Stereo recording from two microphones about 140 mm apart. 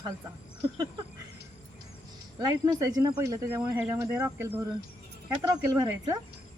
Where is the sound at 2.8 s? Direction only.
25° right (ahead or behind).